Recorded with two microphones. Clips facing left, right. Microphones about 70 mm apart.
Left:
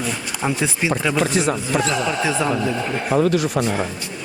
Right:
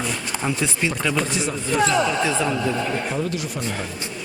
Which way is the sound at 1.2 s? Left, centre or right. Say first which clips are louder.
Left 6 dB; left.